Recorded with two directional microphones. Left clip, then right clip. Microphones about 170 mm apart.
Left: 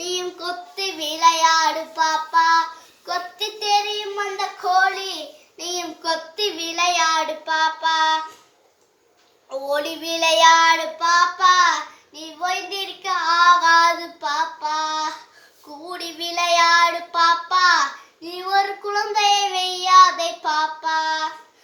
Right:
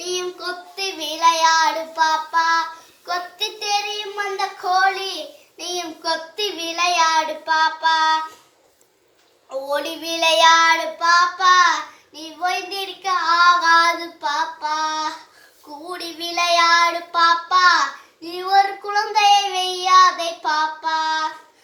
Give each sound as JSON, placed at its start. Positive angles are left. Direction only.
{"t": 0.0, "sound": "child singing", "side_deg": 25}
{"t": 9.5, "sound": "child singing", "side_deg": 25}